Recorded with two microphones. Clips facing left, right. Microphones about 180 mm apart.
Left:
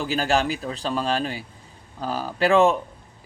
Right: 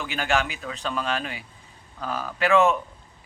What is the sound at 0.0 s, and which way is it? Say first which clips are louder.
Speech: left 3 dB; 35° left (ahead or behind).